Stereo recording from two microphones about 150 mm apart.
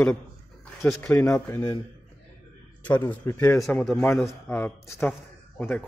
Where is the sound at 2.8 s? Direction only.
10° left (ahead or behind).